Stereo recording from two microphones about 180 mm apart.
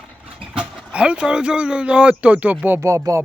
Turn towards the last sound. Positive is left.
turn(degrees=-15)  # may be behind; listen again after turning